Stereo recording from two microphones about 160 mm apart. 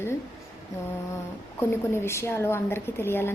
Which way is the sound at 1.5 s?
15° left (ahead or behind).